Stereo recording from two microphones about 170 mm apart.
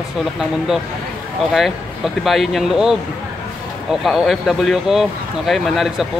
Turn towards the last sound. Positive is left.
turn(degrees=0)  # may be behind; listen again after turning